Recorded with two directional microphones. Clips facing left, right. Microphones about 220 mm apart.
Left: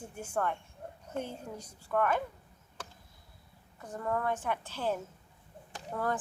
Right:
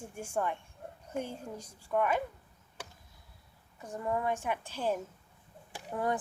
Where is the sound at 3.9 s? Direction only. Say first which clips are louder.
Even; 10° right (ahead or behind).